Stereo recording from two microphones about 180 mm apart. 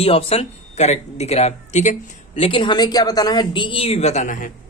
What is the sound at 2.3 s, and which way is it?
Speech, 30° left (ahead or behind).